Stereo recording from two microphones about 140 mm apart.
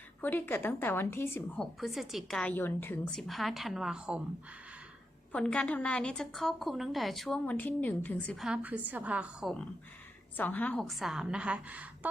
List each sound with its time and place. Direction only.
0.2 s a woman's voice: 15° left (ahead or behind)
1.5 s a woman's voice: centre (ahead or behind); by 3.0 s 15° left (ahead or behind)
3.1 s a woman's voice: centre (ahead or behind)
5.3 s a woman's voice: 10° left (ahead or behind)
8.4 s a woman's voice: 5° right (ahead or behind)
10.3 s a woman's voice: 10° left (ahead or behind)
10.8 s a woman's voice: centre (ahead or behind)